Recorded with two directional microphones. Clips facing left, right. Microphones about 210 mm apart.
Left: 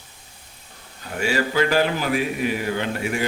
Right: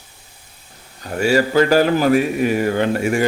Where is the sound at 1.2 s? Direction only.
40° right (ahead or behind).